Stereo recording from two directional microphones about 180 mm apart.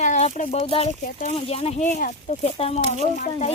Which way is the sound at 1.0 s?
50° left (ahead or behind).